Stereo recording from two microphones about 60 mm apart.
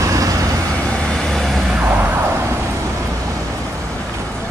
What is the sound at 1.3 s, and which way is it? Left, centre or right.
Vehicle, centre.